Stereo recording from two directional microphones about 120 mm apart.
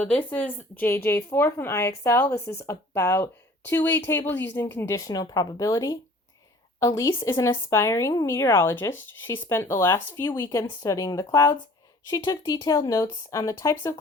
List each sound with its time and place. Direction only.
0.0 s speech: 15° left (ahead or behind)